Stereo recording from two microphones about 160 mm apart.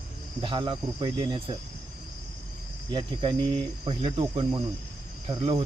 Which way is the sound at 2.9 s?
30° right (ahead or behind).